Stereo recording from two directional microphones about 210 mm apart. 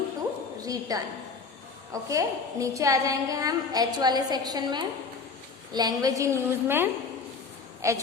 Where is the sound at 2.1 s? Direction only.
15° right (ahead or behind).